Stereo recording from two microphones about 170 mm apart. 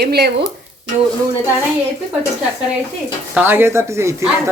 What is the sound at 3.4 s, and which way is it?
Speech, 15° right (ahead or behind).